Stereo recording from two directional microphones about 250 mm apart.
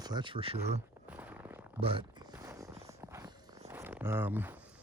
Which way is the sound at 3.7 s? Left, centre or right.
Centre.